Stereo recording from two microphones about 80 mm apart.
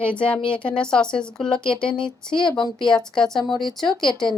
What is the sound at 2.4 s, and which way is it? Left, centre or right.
Speech, left.